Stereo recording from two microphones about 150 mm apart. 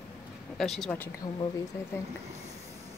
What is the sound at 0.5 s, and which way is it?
Speech, 5° left (ahead or behind).